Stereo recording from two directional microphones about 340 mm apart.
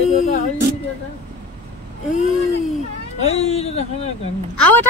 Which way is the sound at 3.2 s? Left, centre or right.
Centre.